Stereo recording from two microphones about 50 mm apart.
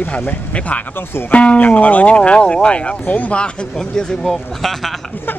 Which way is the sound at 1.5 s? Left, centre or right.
Left.